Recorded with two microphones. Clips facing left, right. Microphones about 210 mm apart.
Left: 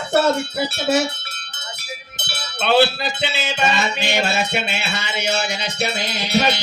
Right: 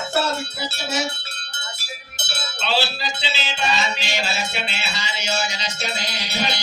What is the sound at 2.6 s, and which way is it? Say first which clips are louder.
Music: left 8 dB; 55° left (ahead or behind).